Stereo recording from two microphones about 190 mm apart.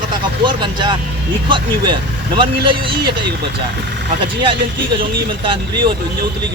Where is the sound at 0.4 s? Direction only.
25° right (ahead or behind).